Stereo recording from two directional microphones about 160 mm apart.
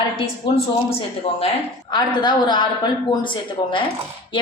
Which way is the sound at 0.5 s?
35° left (ahead or behind).